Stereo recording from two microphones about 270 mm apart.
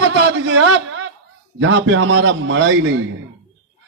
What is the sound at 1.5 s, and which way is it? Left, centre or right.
A man's voice, right.